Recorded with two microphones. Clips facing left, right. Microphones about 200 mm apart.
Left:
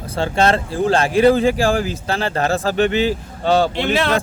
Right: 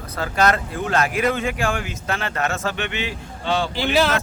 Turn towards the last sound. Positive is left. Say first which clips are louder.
# left 1 dB
turn(degrees=0)  # may be behind; listen again after turning